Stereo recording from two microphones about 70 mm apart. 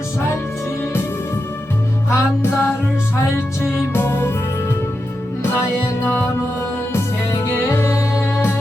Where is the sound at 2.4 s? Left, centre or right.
Left.